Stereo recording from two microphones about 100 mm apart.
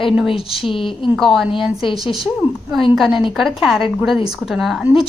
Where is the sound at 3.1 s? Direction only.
55° left (ahead or behind).